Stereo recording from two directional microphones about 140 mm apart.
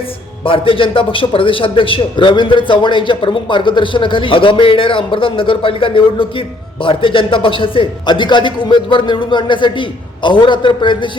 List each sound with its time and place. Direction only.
0.4 s a man's voice: 40° left (ahead or behind)